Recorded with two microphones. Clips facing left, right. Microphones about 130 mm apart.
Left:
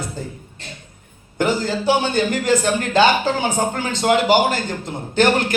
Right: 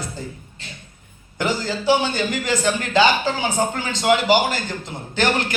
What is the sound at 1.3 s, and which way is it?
A man's voice, 50° left (ahead or behind).